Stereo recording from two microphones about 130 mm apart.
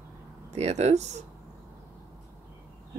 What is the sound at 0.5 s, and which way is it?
Speech, 60° right (ahead or behind).